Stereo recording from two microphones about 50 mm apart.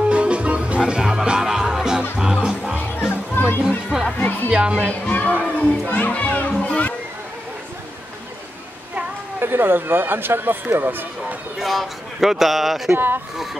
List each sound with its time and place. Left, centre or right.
0.1 s music: right
3.0 s music: left
3.6 s music: centre
4.2 s music: left
4.5 s music: right
5.0 s a child's voice: left
9.4 s speech: right
11.6 s speech: centre
12.9 s speech: right